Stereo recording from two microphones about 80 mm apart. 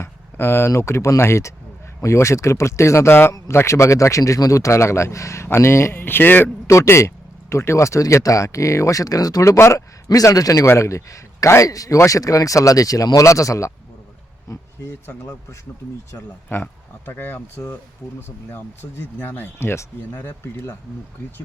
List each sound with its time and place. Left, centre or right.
0.0 s speech: left
6.7 s a man's voice: left
16.5 s speech: left